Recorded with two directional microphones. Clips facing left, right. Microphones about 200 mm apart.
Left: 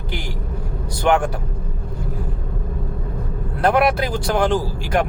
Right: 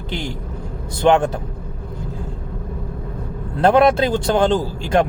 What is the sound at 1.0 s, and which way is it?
Speech, 25° right (ahead or behind).